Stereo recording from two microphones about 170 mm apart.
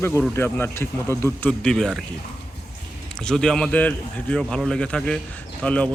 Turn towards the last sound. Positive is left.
turn(degrees=5)  # may be behind; listen again after turning